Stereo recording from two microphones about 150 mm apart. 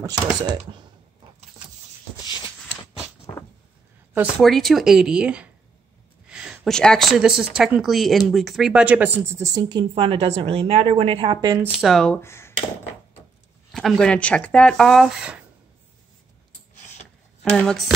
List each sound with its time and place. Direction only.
0.0 s speech: 25° right (ahead or behind)
2.1 s shuffle: 30° left (ahead or behind)
4.4 s speech: centre (ahead or behind); by 11.3 s 40° right (ahead or behind)
11.6 s speech: centre (ahead or behind)
12.2 s speech: 15° left (ahead or behind)
13.7 s speech: centre (ahead or behind)
17.6 s speech: 5° left (ahead or behind)